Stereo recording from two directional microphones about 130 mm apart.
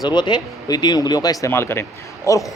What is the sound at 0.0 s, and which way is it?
A man's voice, 35° left (ahead or behind).